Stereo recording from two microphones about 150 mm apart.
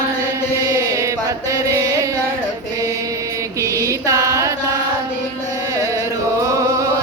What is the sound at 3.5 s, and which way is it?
Music, 20° right (ahead or behind).